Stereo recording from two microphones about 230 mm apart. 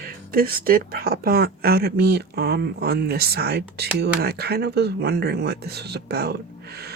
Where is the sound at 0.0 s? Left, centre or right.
Right.